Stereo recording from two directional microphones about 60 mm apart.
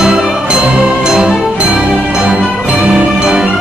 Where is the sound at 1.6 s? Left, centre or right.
Centre.